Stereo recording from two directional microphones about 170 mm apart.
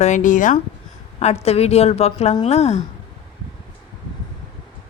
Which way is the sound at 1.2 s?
40° left (ahead or behind).